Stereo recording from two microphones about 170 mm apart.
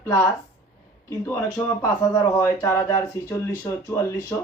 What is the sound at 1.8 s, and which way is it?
Speech, 15° left (ahead or behind).